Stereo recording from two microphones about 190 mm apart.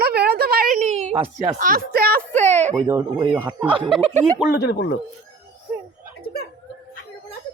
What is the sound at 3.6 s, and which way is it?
Speech, 25° right (ahead or behind).